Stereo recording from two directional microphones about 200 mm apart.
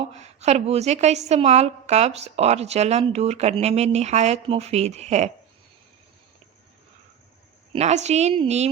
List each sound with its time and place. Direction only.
0.0 s a woman's voice: 35° right (ahead or behind)
7.7 s a woman's voice: 35° right (ahead or behind)